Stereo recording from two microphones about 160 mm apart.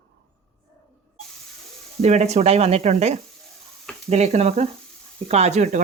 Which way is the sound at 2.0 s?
45° right (ahead or behind).